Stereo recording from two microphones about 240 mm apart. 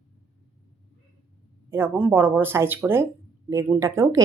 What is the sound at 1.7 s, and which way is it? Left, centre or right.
A woman's voice, centre.